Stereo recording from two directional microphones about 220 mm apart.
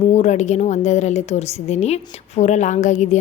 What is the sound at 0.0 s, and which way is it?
A woman's voice, 30° left (ahead or behind).